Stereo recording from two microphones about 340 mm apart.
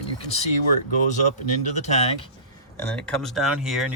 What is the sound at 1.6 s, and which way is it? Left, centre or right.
Speech, centre.